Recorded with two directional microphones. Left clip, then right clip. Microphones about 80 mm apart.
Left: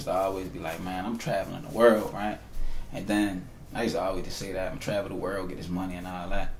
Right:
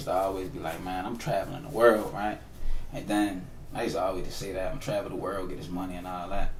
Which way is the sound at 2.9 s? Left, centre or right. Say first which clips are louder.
Even; left.